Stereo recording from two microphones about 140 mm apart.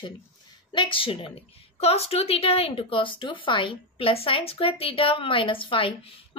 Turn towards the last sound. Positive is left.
turn(degrees=40)  # may be behind; listen again after turning